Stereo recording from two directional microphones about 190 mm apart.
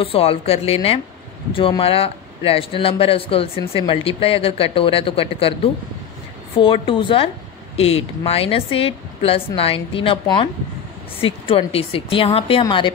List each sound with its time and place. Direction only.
0.0 s speech: 30° left (ahead or behind)